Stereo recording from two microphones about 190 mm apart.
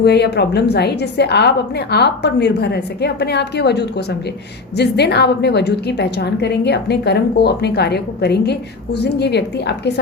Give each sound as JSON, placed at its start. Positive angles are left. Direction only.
{"t": 0.0, "sound": "a woman's voice", "side_deg": 60}